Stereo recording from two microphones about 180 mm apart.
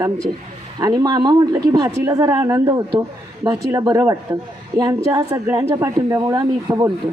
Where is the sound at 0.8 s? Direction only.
20° right (ahead or behind).